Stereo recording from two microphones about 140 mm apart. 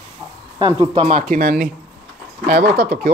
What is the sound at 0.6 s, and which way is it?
Speech, 40° right (ahead or behind).